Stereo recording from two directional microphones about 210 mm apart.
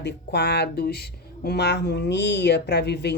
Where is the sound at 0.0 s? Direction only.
50° left (ahead or behind).